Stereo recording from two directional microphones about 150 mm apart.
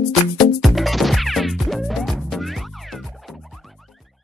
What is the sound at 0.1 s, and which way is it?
Music, centre (ahead or behind).